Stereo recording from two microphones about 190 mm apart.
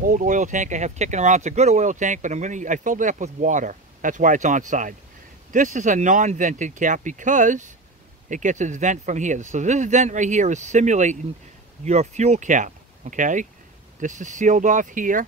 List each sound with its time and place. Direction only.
0.0 s speech: 45° right (ahead or behind)